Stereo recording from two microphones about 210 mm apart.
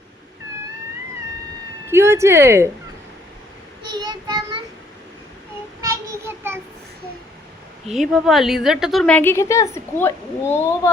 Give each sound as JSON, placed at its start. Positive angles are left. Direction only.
{"t": 1.9, "sound": "speech", "side_deg": -10}
{"t": 3.9, "sound": "child singing", "side_deg": -20}
{"t": 5.8, "sound": "child singing", "side_deg": -15}
{"t": 7.9, "sound": "a woman's voice", "side_deg": 0}